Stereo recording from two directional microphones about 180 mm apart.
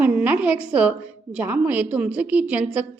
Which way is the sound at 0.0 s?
10° right (ahead or behind).